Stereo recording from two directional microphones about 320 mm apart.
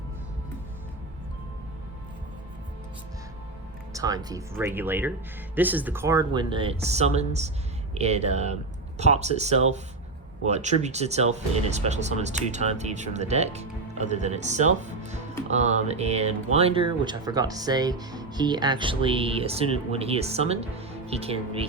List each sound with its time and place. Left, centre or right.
3.9 s speech: centre